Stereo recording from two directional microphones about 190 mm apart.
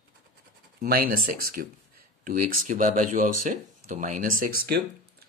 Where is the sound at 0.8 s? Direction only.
50° right (ahead or behind).